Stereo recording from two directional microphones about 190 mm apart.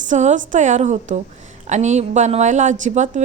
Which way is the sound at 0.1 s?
40° right (ahead or behind).